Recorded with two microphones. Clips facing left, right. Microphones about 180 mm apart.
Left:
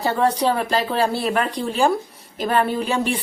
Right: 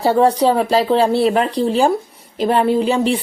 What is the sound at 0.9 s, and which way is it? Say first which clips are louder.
A woman's voice: right 6 dB; 25° right (ahead or behind).